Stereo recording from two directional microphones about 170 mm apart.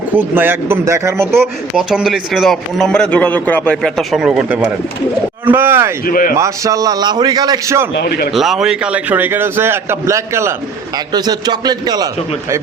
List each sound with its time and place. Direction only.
0.2 s a man's voice: 10° right (ahead or behind)
6.1 s a man's voice: 55° left (ahead or behind)
6.3 s a man's voice: 20° right (ahead or behind)
7.9 s speech: 65° left (ahead or behind)
8.3 s a man's voice: centre (ahead or behind); by 12.0 s 25° right (ahead or behind)